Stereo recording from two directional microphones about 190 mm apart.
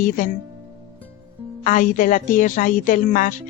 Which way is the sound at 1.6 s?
45° left (ahead or behind).